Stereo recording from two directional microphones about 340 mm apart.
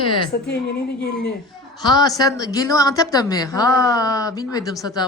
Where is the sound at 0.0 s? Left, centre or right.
Centre.